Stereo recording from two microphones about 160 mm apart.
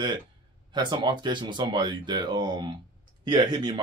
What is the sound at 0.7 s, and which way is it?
Speech, 30° right (ahead or behind).